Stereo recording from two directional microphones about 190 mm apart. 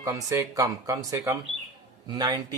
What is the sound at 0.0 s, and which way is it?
Speech, 15° right (ahead or behind).